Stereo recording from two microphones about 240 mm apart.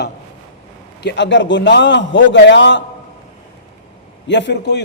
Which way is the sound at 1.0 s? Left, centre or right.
Left.